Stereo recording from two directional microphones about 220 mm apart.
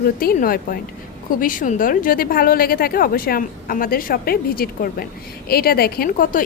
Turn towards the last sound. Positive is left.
turn(degrees=40)  # may be behind; listen again after turning